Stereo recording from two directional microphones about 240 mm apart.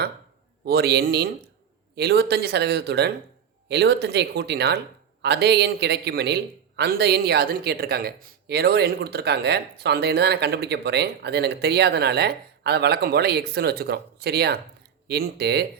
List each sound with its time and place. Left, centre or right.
0.6 s a man's voice: right